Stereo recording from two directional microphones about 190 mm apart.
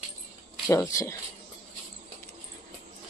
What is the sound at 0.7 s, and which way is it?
Speech, 15° left (ahead or behind).